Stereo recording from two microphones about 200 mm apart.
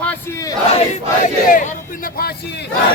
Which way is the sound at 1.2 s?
40° left (ahead or behind).